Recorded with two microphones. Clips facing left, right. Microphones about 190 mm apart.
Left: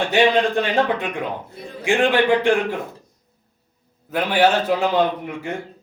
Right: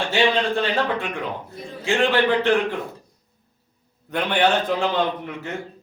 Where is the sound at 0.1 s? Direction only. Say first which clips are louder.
Left 3 dB; 15° left (ahead or behind).